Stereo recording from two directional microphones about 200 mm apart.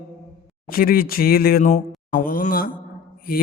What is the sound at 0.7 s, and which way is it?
Speech, 45° left (ahead or behind).